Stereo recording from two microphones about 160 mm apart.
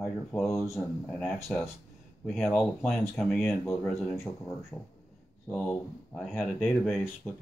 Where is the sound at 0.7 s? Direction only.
10° left (ahead or behind).